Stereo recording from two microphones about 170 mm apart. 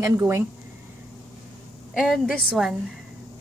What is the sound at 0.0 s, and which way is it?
Speech, 15° right (ahead or behind).